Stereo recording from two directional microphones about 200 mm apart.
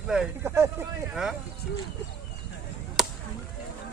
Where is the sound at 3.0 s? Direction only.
Centre (ahead or behind).